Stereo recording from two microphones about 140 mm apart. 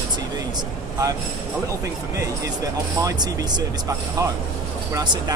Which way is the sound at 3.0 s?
25° right (ahead or behind).